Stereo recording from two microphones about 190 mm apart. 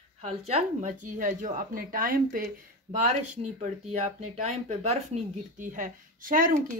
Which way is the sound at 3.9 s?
35° right (ahead or behind).